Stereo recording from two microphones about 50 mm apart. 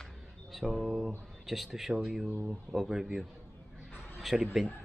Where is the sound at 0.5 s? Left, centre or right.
Centre.